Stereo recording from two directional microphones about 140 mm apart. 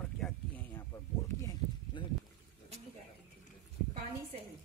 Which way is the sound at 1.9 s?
35° left (ahead or behind).